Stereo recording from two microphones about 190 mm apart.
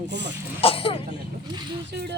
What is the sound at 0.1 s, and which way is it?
Speech, 65° right (ahead or behind).